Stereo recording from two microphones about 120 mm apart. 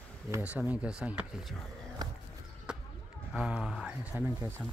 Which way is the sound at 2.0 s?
35° right (ahead or behind).